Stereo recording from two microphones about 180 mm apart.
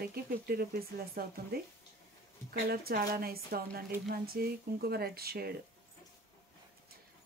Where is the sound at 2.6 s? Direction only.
55° right (ahead or behind).